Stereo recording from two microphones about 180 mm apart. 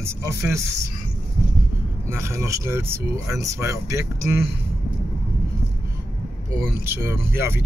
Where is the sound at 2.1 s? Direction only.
15° right (ahead or behind).